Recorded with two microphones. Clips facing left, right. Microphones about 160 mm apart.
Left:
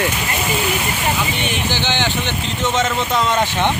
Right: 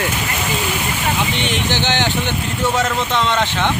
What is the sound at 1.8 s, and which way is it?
Speech, 15° right (ahead or behind).